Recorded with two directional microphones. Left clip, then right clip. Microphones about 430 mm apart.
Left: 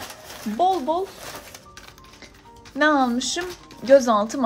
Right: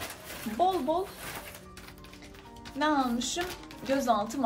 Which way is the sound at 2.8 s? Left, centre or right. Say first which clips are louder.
Left 9 dB; centre.